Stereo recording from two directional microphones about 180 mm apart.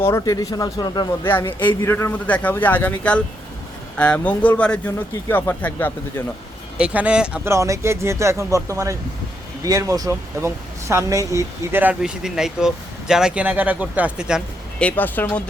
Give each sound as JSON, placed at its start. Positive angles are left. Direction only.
{"t": 0.0, "sound": "speech", "side_deg": 15}
{"t": 6.7, "sound": "speech", "side_deg": -5}
{"t": 14.8, "sound": "speech", "side_deg": 10}